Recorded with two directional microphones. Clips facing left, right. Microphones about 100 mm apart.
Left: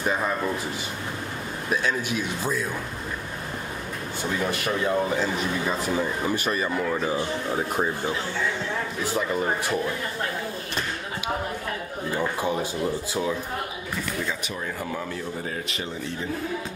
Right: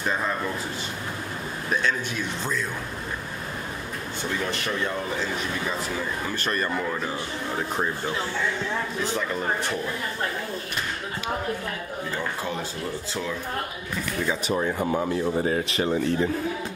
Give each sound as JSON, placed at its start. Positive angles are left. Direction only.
{"t": 1.7, "sound": "a man's voice", "side_deg": 10}
{"t": 4.5, "sound": "a man's voice", "side_deg": 10}
{"t": 6.2, "sound": "a man's voice", "side_deg": 10}
{"t": 9.1, "sound": "a man's voice", "side_deg": 10}
{"t": 12.1, "sound": "a man's voice", "side_deg": 15}
{"t": 14.8, "sound": "speech", "side_deg": -25}
{"t": 15.3, "sound": "speech", "side_deg": -40}